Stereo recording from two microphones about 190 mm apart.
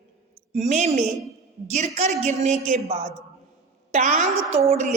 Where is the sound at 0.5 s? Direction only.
40° right (ahead or behind).